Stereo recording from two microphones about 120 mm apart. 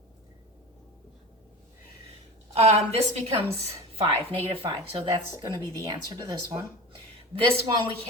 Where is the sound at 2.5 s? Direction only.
60° right (ahead or behind); by 5.5 s 45° right (ahead or behind).